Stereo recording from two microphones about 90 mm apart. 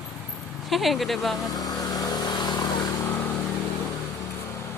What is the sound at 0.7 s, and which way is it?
Speech, centre (ahead or behind).